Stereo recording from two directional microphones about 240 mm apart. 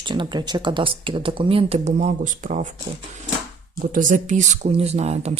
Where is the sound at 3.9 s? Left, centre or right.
Right.